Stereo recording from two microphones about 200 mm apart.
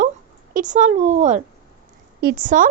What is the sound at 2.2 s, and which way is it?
Speech, 50° right (ahead or behind).